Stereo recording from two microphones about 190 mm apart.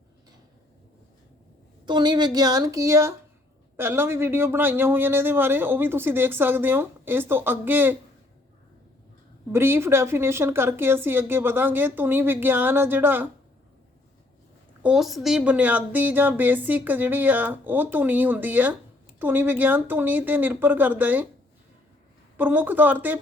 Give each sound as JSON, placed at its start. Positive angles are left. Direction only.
{"t": 1.9, "sound": "speech", "side_deg": -25}
{"t": 9.5, "sound": "speech", "side_deg": -10}
{"t": 14.8, "sound": "speech", "side_deg": 0}
{"t": 22.4, "sound": "speech", "side_deg": -10}